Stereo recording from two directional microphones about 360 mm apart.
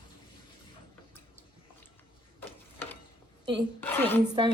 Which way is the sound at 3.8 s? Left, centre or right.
Centre.